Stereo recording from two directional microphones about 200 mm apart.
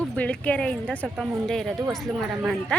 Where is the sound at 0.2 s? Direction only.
5° left (ahead or behind).